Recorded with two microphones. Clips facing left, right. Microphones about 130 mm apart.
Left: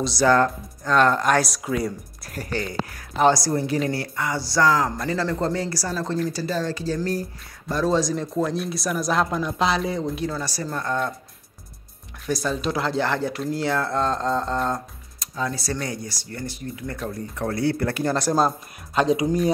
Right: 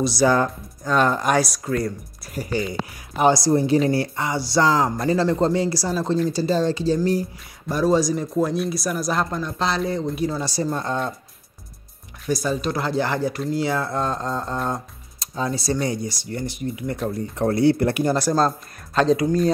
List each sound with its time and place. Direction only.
0.0 s speech: 10° right (ahead or behind)
1.5 s speech: 5° left (ahead or behind); by 7.0 s 20° right (ahead or behind)
7.6 s speech: 5° right (ahead or behind)
10.2 s speech: 20° right (ahead or behind)
12.3 s speech: centre (ahead or behind)
15.1 s speech: 25° right (ahead or behind)
18.9 s speech: 15° left (ahead or behind)